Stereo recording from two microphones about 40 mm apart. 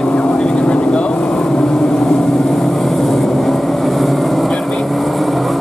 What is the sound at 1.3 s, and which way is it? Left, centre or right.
Vehicle, centre.